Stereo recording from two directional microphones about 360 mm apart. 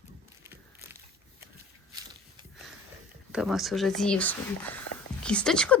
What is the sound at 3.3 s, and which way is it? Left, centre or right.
Speech, centre.